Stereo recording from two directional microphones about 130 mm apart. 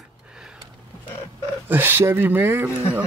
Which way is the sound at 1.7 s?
15° right (ahead or behind).